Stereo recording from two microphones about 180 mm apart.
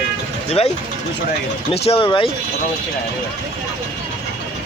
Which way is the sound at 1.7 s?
35° left (ahead or behind).